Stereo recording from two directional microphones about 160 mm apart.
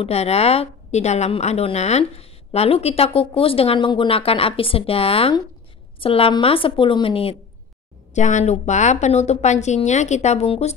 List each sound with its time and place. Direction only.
0.0 s a woman's voice: 40° left (ahead or behind)
8.1 s a woman's voice: 50° left (ahead or behind)